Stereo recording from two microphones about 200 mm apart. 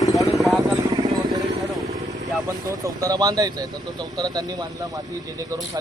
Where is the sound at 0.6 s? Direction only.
20° right (ahead or behind).